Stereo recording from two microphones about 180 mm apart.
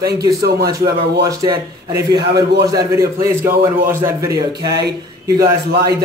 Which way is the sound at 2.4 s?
70° right (ahead or behind).